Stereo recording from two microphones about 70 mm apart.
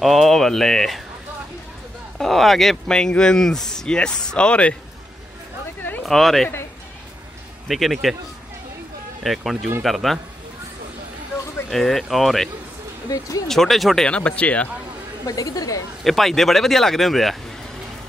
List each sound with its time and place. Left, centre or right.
0.0 s speech: centre
2.1 s speech: centre
6.0 s speech: centre
7.6 s speech: centre
9.2 s speech: centre
11.7 s speech: centre
13.5 s speech: centre
14.0 s speech: centre
15.2 s a woman's voice: left
16.0 s speech: centre